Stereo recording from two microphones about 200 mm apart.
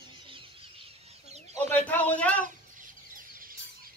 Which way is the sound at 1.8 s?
5° left (ahead or behind).